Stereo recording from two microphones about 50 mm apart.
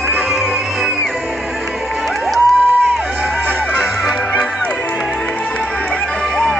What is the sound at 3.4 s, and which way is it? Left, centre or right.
Music, right.